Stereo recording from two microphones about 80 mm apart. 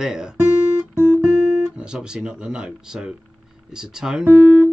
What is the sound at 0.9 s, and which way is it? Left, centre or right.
Guitar, right.